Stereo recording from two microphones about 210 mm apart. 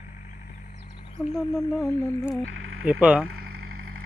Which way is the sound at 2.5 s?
75° right (ahead or behind).